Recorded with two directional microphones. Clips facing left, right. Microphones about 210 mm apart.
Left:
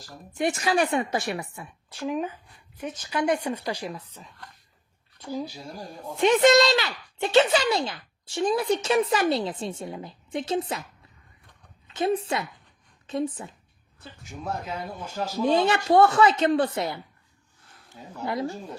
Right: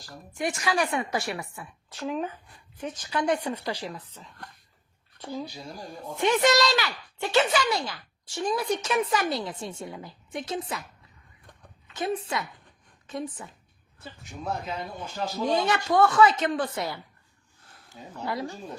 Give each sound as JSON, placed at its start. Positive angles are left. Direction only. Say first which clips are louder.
{"t": 0.3, "sound": "speech", "louder": "left 3 dB", "side_deg": 25}
{"t": 6.1, "sound": "speech", "louder": "left 4 dB", "side_deg": 25}
{"t": 11.9, "sound": "speech", "louder": "left 4 dB", "side_deg": 25}
{"t": 14.8, "sound": "speech", "louder": "left 1 dB", "side_deg": 10}
{"t": 15.4, "sound": "speech", "louder": "left 4 dB", "side_deg": 30}
{"t": 18.3, "sound": "speech", "louder": "left 3 dB", "side_deg": 20}